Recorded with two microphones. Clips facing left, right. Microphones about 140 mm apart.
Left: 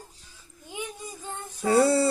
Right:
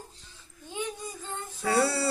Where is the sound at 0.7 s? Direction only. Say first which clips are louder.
Right 2 dB; 15° left (ahead or behind).